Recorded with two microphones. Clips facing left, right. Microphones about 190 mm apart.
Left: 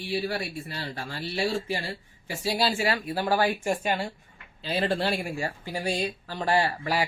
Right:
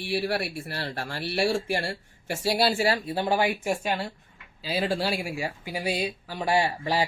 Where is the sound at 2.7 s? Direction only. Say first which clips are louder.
Right 2 dB; 30° right (ahead or behind); by 6.7 s 10° right (ahead or behind).